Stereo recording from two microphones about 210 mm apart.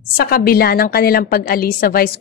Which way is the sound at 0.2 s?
45° left (ahead or behind).